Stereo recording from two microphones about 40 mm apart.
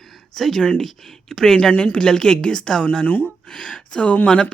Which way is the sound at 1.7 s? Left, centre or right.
Left.